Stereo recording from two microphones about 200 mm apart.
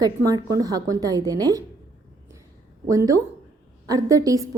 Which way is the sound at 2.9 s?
15° right (ahead or behind).